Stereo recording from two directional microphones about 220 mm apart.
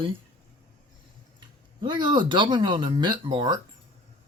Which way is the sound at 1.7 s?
20° right (ahead or behind).